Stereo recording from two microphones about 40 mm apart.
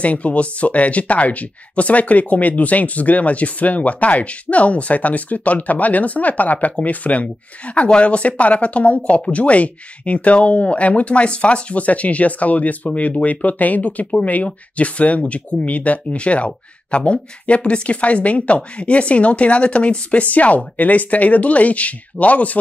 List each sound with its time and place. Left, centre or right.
0.0 s speech: left